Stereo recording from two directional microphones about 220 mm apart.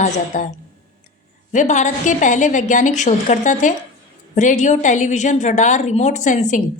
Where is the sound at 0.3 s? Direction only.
40° left (ahead or behind).